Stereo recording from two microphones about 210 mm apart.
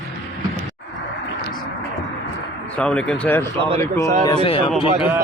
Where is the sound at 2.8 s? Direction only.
5° left (ahead or behind).